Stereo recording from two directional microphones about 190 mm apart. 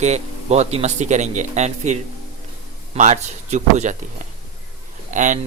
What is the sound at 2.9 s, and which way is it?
A man's voice, 40° right (ahead or behind).